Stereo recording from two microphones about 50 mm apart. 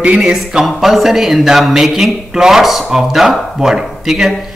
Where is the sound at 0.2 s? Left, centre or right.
Centre.